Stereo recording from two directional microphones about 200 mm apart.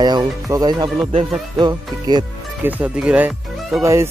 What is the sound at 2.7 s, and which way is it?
Speech, 5° right (ahead or behind).